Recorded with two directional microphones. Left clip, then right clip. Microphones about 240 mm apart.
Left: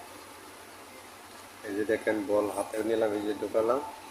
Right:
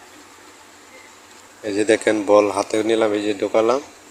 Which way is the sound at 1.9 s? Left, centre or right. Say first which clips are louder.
Right 13 dB; right.